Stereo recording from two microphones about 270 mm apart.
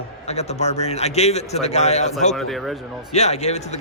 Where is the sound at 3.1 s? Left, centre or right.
Left.